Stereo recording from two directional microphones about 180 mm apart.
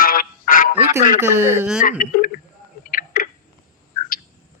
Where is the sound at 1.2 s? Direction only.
15° right (ahead or behind).